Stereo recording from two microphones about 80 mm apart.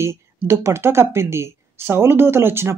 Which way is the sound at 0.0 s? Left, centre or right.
Right.